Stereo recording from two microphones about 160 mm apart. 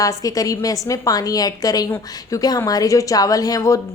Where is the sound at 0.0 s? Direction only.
20° left (ahead or behind).